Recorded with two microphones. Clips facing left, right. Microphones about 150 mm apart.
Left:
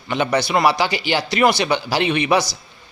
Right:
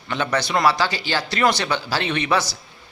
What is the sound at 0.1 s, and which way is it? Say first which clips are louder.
Speech: left 4 dB; 10° left (ahead or behind).